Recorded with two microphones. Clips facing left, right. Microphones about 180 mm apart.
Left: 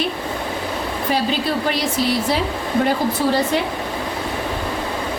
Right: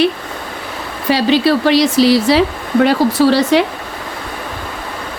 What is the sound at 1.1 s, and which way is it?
Speech, 85° right.